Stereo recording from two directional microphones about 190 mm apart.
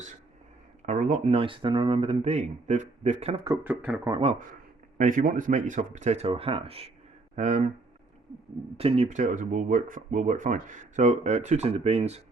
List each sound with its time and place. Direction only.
0.9 s speech: 40° right (ahead or behind)
3.4 s speech: 15° right (ahead or behind)
4.1 s speech: 30° right (ahead or behind)
4.9 s speech: 45° right (ahead or behind)
8.8 s speech: 35° right (ahead or behind)